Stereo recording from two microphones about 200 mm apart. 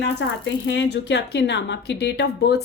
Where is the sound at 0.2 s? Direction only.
65° left (ahead or behind).